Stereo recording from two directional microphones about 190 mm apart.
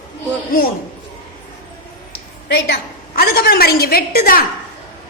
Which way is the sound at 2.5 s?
65° left (ahead or behind).